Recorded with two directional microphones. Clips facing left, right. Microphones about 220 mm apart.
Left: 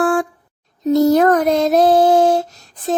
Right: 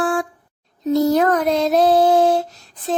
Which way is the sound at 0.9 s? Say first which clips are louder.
Left 4 dB; 45° left (ahead or behind).